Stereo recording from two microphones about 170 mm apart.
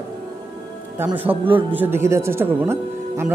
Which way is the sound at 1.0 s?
10° right (ahead or behind).